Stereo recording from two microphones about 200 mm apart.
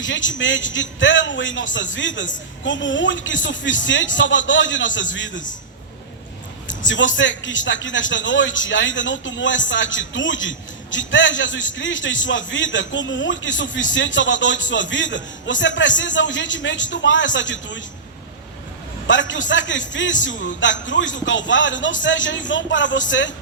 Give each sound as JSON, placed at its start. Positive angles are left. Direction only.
{"t": 0.0, "sound": "a man's voice", "side_deg": 70}
{"t": 6.7, "sound": "a man's voice", "side_deg": 65}
{"t": 19.0, "sound": "a man's voice", "side_deg": 65}